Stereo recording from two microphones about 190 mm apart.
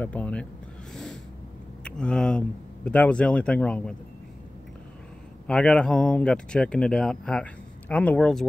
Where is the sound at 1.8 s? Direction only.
5° left (ahead or behind).